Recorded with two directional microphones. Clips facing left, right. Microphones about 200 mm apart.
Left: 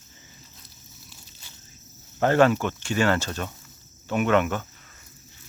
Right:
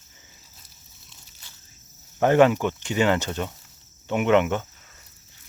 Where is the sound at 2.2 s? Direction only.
15° right (ahead or behind).